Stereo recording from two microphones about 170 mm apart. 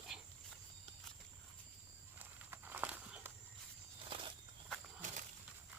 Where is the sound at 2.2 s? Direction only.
10° right (ahead or behind).